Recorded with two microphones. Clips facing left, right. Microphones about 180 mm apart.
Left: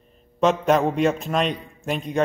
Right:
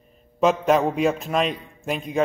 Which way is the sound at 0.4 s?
Centre (ahead or behind).